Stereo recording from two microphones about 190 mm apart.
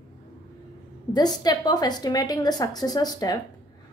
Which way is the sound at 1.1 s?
20° left (ahead or behind).